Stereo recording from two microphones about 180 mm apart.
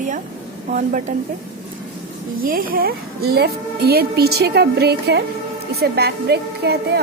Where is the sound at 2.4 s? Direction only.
55° right (ahead or behind).